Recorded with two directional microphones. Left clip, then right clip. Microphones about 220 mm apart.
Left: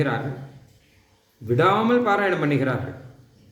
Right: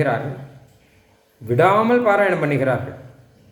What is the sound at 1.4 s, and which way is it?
A man's voice, 20° left (ahead or behind).